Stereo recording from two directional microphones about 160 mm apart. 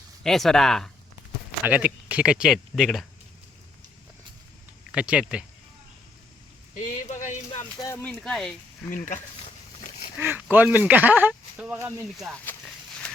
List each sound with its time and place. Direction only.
0.2 s speech: centre (ahead or behind)
1.6 s speech: 10° right (ahead or behind)
4.9 s speech: 5° right (ahead or behind)
6.7 s speech: 50° left (ahead or behind)
7.8 s speech: 20° left (ahead or behind)
8.0 s speech: 5° left (ahead or behind)
10.2 s speech: 10° right (ahead or behind)
12.5 s a sound: 10° left (ahead or behind)